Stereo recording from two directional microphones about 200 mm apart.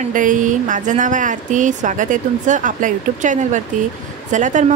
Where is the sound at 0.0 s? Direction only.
40° right (ahead or behind).